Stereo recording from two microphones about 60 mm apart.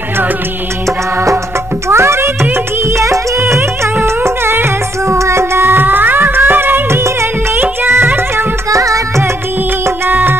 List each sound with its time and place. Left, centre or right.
1.9 s music: right
8.6 s music: right
10.0 s music: right